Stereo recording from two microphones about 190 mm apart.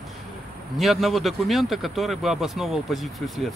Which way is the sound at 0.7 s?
Centre (ahead or behind).